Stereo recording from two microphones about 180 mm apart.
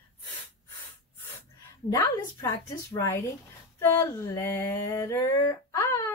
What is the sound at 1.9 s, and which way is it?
Speech, 20° left (ahead or behind).